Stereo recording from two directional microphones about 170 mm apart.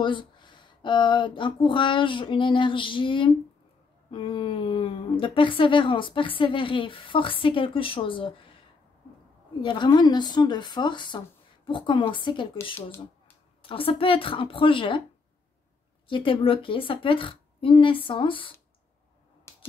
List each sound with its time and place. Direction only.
0.0 s a woman's voice: 30° left (ahead or behind)
9.6 s a woman's voice: 25° left (ahead or behind)
13.6 s speech: 30° left (ahead or behind)
16.1 s speech: 30° left (ahead or behind)
19.5 s a sound: 15° left (ahead or behind)